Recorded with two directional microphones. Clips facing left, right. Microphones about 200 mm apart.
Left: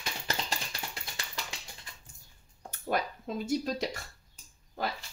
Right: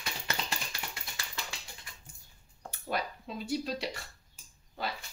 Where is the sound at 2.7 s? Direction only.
50° left (ahead or behind).